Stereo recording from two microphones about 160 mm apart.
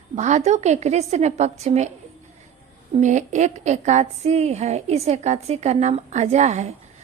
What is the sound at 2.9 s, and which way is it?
A woman's voice, 50° right (ahead or behind).